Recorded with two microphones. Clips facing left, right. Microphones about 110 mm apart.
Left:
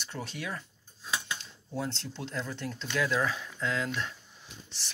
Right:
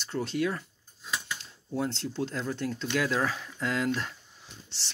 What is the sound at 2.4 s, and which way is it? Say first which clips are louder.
Speech: right 6 dB; 40° right (ahead or behind).